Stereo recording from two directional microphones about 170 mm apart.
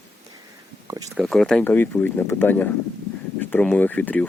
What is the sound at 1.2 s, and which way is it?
Speech, centre (ahead or behind).